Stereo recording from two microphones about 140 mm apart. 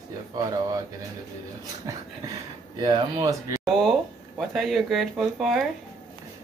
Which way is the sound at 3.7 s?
Centre (ahead or behind).